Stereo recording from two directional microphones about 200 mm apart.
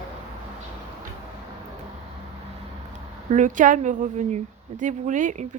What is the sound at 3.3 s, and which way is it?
A woman's voice, 40° right (ahead or behind).